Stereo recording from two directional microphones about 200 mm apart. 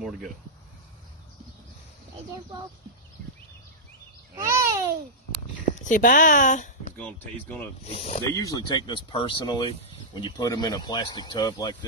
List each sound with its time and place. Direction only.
4.4 s babbling: 15° right (ahead or behind)
5.9 s speech: 45° left (ahead or behind)
7.0 s speech: 5° left (ahead or behind)
7.8 s speech: 30° left (ahead or behind)
8.3 s speech: 15° left (ahead or behind)